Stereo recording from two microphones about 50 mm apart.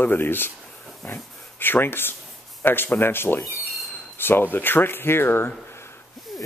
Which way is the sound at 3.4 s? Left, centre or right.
Centre.